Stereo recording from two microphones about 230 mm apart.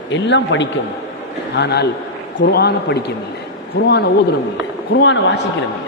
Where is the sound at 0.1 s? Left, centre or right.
Left.